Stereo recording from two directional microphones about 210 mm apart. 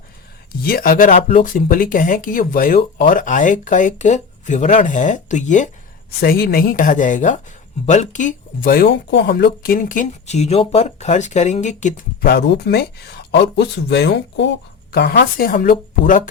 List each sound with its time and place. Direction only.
0.6 s speech: 45° left (ahead or behind)
6.1 s speech: 45° left (ahead or behind)